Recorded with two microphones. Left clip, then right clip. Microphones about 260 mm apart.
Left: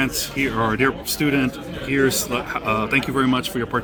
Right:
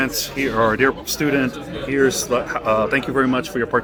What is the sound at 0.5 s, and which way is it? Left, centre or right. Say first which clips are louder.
Speech: right 5 dB; left.